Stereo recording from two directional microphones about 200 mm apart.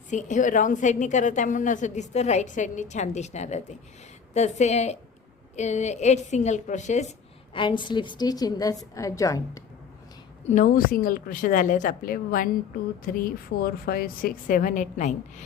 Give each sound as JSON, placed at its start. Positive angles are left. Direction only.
{"t": 0.1, "sound": "a woman's voice", "side_deg": 35}
{"t": 7.5, "sound": "a woman's voice", "side_deg": 25}
{"t": 10.4, "sound": "a woman's voice", "side_deg": 40}